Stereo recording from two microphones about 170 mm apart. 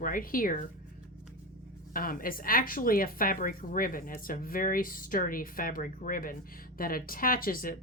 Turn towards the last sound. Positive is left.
turn(degrees=55)  # may be behind; listen again after turning